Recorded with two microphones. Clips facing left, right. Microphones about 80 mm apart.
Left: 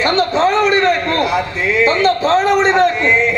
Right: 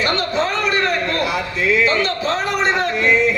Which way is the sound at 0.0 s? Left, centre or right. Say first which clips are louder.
Left 6 dB; left.